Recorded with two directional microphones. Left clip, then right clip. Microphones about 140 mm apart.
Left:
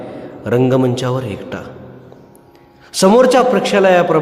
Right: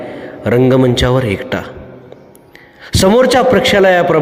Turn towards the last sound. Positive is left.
turn(degrees=-25)  # may be behind; listen again after turning